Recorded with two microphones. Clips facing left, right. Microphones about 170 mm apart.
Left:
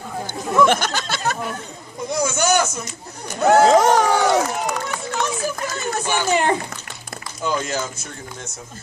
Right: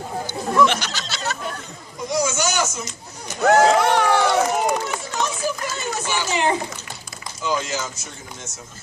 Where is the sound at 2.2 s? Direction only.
55° left (ahead or behind).